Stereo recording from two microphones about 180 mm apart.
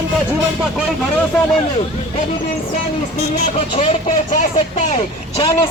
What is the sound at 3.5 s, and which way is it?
A man's voice, 35° left (ahead or behind).